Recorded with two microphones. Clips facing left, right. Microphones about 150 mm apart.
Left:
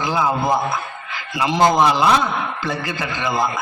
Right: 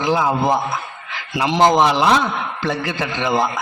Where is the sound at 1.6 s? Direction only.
20° right (ahead or behind).